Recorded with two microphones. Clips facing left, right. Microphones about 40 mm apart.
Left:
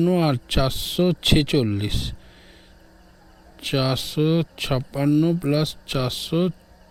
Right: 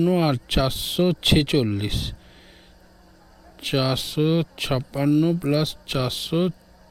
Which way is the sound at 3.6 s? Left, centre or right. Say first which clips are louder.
Even; centre.